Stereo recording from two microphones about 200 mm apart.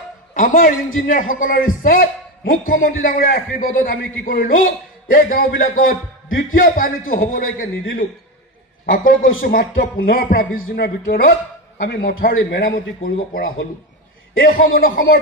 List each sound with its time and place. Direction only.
0.3 s a man's voice: 40° left (ahead or behind)
14.8 s a man's voice: 45° left (ahead or behind)